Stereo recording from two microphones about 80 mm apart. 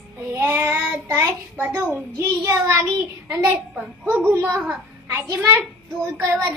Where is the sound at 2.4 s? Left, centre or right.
Right.